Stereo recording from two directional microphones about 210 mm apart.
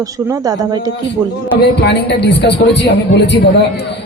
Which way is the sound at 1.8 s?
55° left (ahead or behind).